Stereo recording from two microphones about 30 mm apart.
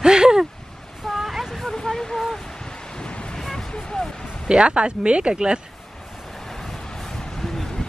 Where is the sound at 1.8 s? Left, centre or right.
Centre.